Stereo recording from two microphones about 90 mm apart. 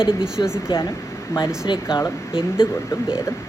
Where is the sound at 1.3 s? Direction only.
35° left (ahead or behind).